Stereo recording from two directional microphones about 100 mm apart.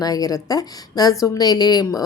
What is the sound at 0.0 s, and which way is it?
A woman's voice, 40° left (ahead or behind).